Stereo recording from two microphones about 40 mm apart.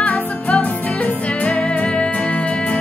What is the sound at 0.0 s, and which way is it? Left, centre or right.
Music, left.